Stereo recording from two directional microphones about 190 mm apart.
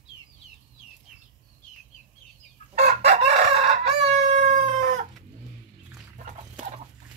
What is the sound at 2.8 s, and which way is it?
Chicken, 35° right (ahead or behind).